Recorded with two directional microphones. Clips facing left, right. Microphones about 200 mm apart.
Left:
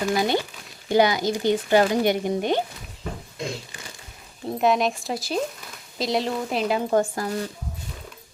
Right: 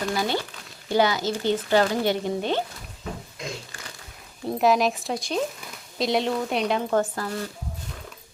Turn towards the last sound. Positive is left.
turn(degrees=15)  # may be behind; listen again after turning